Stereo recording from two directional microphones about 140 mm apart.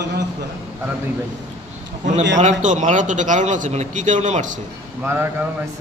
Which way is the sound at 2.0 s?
55° right (ahead or behind).